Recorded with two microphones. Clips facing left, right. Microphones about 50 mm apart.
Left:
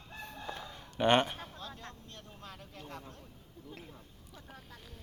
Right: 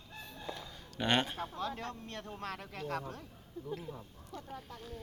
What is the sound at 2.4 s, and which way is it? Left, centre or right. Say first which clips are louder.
Speech: right 7 dB; right.